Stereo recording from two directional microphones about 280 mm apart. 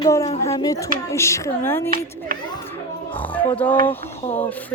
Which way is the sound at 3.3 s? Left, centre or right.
Centre.